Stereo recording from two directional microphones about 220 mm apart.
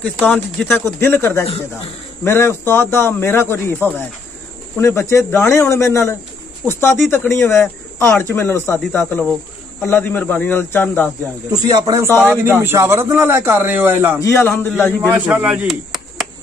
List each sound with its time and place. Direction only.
0.0 s speech: 5° left (ahead or behind)
11.7 s a man's voice: 15° right (ahead or behind)
12.1 s speech: 10° left (ahead or behind)
12.4 s a man's voice: 10° right (ahead or behind)
14.2 s speech: 10° left (ahead or behind)
15.0 s speech: 5° right (ahead or behind)